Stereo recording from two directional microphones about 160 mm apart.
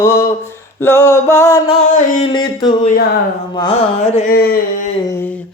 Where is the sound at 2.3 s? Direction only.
30° left (ahead or behind).